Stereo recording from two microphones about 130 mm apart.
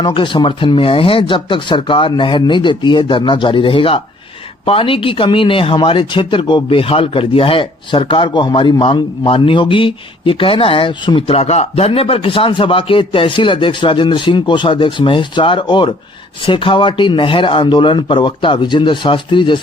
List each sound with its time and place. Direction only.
0.0 s speech: 40° left (ahead or behind)